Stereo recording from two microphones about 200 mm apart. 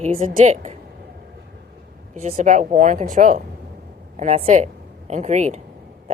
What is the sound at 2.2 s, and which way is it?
A woman's voice, 40° right (ahead or behind).